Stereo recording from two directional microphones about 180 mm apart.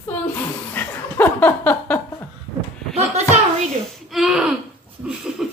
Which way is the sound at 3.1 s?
40° right (ahead or behind).